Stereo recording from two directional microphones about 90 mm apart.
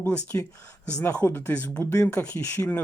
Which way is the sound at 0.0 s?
15° left (ahead or behind).